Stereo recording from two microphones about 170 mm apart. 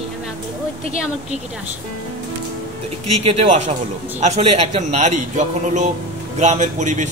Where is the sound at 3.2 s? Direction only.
40° right (ahead or behind).